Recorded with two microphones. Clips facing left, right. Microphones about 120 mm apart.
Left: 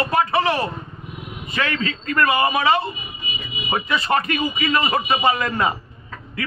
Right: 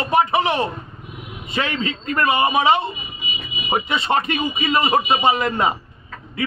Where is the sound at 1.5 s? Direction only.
25° right (ahead or behind).